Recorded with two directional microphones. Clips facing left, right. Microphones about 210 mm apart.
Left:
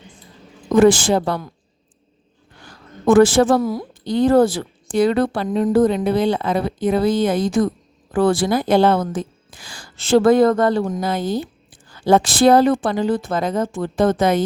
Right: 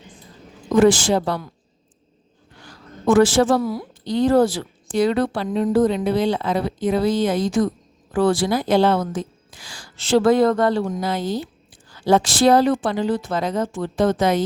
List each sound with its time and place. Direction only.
0.8 s a woman's voice: 55° left (ahead or behind)
3.1 s a woman's voice: 55° left (ahead or behind)